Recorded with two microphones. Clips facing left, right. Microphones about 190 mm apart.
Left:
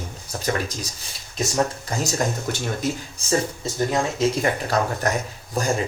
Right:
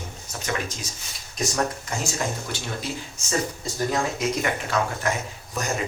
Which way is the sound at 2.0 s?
40° left (ahead or behind).